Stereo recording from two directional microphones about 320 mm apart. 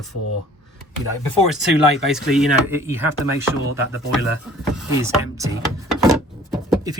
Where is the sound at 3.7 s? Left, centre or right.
Left.